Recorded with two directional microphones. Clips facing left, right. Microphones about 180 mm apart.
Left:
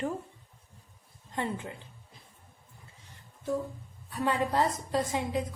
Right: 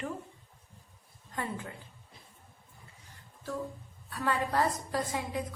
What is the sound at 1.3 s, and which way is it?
Speech, 25° left (ahead or behind).